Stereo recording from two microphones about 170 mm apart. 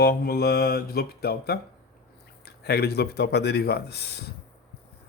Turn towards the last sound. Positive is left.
turn(degrees=75)  # may be behind; listen again after turning